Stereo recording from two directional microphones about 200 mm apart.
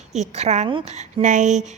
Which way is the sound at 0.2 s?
35° right (ahead or behind).